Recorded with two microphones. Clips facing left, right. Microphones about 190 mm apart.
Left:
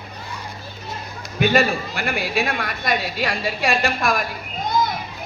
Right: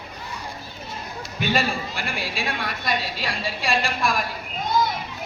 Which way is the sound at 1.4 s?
50° left (ahead or behind).